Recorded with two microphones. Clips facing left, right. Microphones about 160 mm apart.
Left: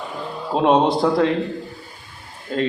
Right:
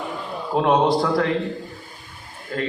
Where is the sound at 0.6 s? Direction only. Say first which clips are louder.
Left 2 dB; 25° left (ahead or behind).